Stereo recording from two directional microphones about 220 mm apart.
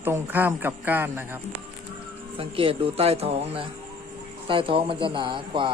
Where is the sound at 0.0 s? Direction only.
10° right (ahead or behind).